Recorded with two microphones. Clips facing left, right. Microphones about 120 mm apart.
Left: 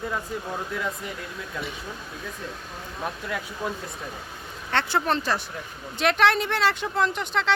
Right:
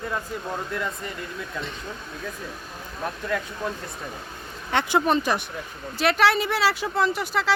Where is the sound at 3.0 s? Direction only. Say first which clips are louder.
Right 3 dB; 10° left (ahead or behind).